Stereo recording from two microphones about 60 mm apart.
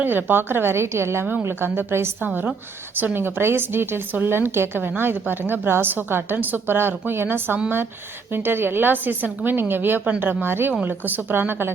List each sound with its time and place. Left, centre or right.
0.0 s a woman's voice: right
2.2 s a woman's voice: right